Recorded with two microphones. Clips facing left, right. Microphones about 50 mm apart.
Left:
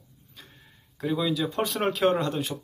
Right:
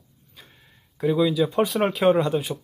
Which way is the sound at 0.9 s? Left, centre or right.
Centre.